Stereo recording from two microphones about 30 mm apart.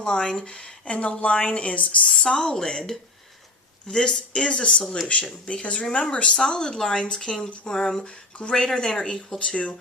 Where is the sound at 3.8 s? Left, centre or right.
Left.